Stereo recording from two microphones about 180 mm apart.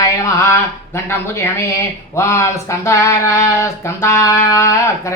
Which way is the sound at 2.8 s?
15° left (ahead or behind).